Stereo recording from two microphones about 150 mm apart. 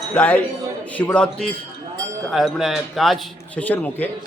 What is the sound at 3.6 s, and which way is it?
Speech, 10° left (ahead or behind).